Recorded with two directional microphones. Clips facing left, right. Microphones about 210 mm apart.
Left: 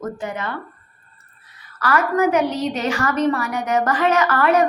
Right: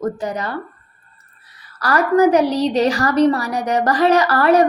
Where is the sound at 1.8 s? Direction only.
35° right (ahead or behind).